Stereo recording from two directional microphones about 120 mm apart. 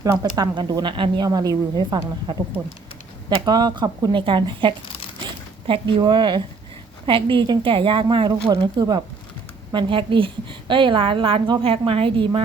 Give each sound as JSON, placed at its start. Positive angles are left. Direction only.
{"t": 0.0, "sound": "a woman's voice", "side_deg": -30}
{"t": 9.7, "sound": "a woman's voice", "side_deg": -45}